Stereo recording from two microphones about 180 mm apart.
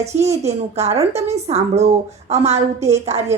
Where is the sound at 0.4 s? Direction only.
35° right (ahead or behind).